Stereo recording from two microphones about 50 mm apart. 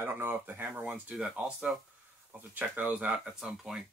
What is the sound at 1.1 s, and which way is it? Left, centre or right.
Speech, centre.